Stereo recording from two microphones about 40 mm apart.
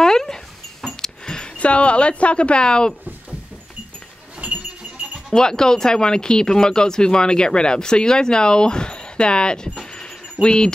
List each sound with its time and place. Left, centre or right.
0.0 s dog: centre
0.8 s a sound: centre
1.6 s speech: left
4.4 s alarm clock: right
5.3 s speech: centre